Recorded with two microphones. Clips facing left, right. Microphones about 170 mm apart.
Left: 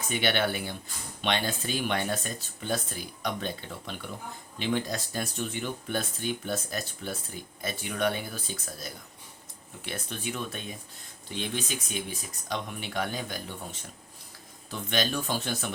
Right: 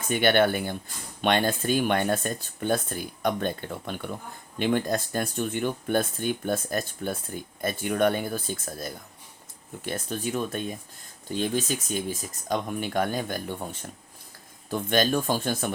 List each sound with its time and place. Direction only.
0.1 s speech: 50° right (ahead or behind)